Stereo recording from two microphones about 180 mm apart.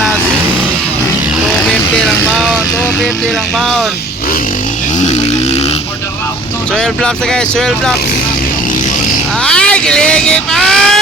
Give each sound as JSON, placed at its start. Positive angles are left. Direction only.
{"t": 1.6, "sound": "speech", "side_deg": 0}
{"t": 3.6, "sound": "speech", "side_deg": 0}
{"t": 4.9, "sound": "vehicle", "side_deg": 40}
{"t": 6.7, "sound": "speech", "side_deg": 5}
{"t": 9.4, "sound": "vehicle", "side_deg": 5}